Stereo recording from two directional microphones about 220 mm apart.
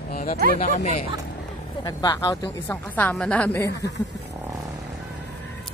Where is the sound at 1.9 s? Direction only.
20° left (ahead or behind).